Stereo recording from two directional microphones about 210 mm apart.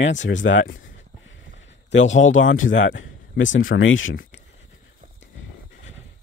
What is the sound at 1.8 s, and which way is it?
Speech, 65° left (ahead or behind).